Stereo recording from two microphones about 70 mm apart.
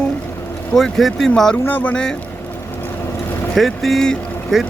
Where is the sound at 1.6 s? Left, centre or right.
Left.